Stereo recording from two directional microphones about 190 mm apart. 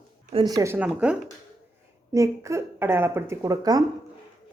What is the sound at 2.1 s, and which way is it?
Speech, 15° right (ahead or behind).